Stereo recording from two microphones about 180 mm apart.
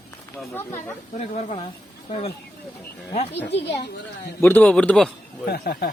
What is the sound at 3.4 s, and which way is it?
Speech, 70° left (ahead or behind).